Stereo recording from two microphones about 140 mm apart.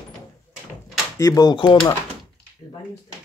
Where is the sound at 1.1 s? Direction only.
25° left (ahead or behind).